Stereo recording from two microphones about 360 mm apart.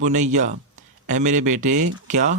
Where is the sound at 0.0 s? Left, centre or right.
Centre.